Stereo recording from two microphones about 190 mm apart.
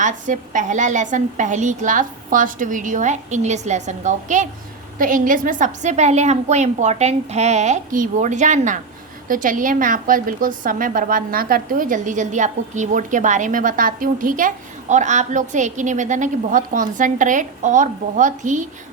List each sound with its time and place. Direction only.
0.0 s a woman's voice: 40° right (ahead or behind)